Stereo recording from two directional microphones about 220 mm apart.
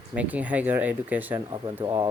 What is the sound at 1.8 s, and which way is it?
Speech, 20° right (ahead or behind).